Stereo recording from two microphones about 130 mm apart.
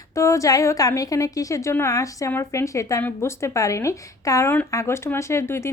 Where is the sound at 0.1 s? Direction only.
25° left (ahead or behind).